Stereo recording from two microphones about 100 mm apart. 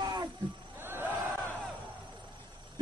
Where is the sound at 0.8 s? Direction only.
20° right (ahead or behind).